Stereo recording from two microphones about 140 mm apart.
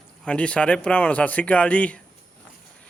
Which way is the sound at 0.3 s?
10° left (ahead or behind).